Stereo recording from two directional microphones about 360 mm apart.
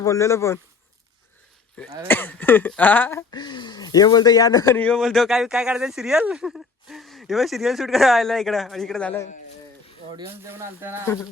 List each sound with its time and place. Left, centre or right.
0.0 s speech: centre
1.7 s speech: centre
10.2 s speech: centre
11.0 s speech: centre